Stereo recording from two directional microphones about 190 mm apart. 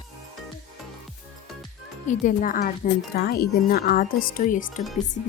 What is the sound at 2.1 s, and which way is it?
Speech, 45° left (ahead or behind).